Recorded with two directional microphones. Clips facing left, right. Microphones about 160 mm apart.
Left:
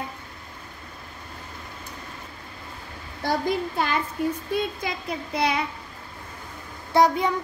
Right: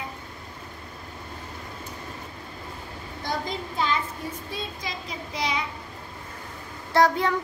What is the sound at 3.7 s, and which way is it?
Child singing, 55° left (ahead or behind).